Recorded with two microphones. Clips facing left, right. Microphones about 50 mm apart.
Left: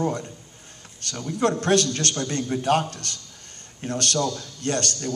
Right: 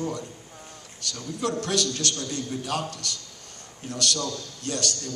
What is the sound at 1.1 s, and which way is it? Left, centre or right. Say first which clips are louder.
A man's voice: left 5 dB; left.